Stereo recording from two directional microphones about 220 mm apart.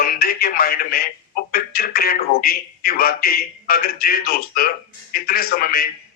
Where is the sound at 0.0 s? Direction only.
40° left (ahead or behind).